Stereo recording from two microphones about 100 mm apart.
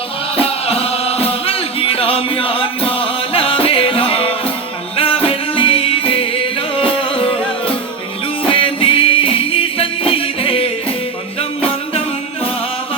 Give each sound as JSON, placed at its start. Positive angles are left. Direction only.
{"t": 0.3, "sound": "music", "side_deg": 80}
{"t": 8.4, "sound": "music", "side_deg": 65}